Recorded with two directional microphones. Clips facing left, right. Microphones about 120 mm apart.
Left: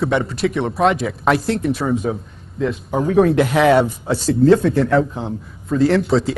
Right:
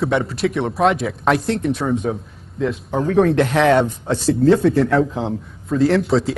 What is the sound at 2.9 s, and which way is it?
Speech, 10° left (ahead or behind).